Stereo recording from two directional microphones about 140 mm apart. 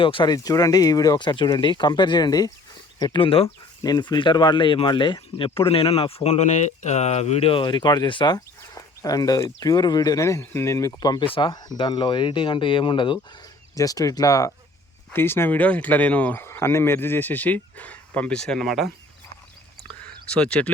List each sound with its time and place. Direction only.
0.0 s speech: 40° left (ahead or behind)
0.3 s speech: 25° left (ahead or behind); by 3.4 s 40° left (ahead or behind)
3.4 s speech: 30° left (ahead or behind)
13.7 s speech: 25° left (ahead or behind); by 18.9 s centre (ahead or behind)
20.3 s speech: 10° left (ahead or behind)